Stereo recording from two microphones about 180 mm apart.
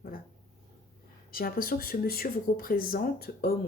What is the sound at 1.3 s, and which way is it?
Speech, 55° left (ahead or behind).